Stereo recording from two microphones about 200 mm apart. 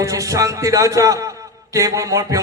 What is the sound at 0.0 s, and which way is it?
A man's voice, 15° right (ahead or behind).